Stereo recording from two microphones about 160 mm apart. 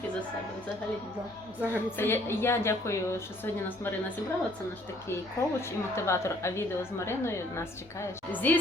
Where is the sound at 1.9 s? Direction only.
15° left (ahead or behind).